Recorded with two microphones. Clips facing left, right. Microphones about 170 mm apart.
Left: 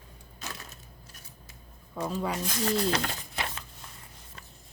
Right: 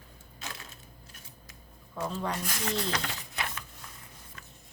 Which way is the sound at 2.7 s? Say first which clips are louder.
Left 5 dB; 40° left (ahead or behind).